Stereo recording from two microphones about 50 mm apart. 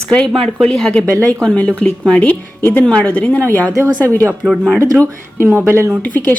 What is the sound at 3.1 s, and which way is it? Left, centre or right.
Speech, left.